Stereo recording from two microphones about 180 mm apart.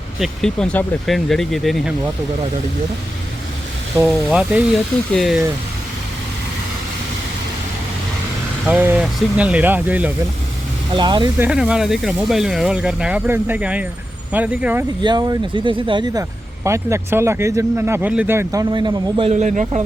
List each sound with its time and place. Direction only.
0.2 s speech: 5° left (ahead or behind)
4.0 s speech: 5° right (ahead or behind)
8.6 s speech: 10° right (ahead or behind)
10.9 s speech: 25° right (ahead or behind)
11.3 s speech: 5° right (ahead or behind)
15.0 s speech: 25° right (ahead or behind)
16.6 s speech: 15° right (ahead or behind)
19.3 s speech: 40° right (ahead or behind)